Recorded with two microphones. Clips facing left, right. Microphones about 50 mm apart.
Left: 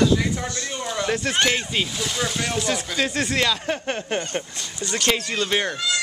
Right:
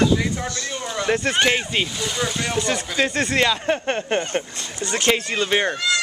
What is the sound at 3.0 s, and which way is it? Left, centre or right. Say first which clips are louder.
Speech: right 4 dB; right.